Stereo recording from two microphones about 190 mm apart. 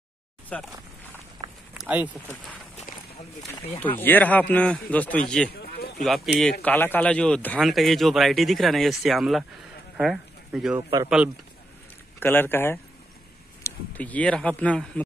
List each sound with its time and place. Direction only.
0.5 s a man's voice: 5° left (ahead or behind)
1.7 s speech: 10° right (ahead or behind)
4.0 s a man's voice: 10° left (ahead or behind)
5.5 s a sound: 55° left (ahead or behind)
6.0 s a man's voice: centre (ahead or behind)
10.8 s speech: 25° right (ahead or behind)
12.2 s a man's voice: 10° left (ahead or behind)